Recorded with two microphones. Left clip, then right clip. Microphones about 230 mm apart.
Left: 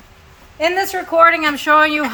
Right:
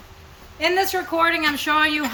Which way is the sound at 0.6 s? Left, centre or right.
Centre.